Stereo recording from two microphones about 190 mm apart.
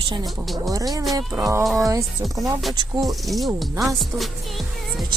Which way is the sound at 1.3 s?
15° right (ahead or behind).